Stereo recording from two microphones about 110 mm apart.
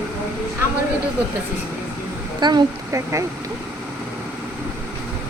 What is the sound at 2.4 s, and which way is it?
Speech, 40° right (ahead or behind).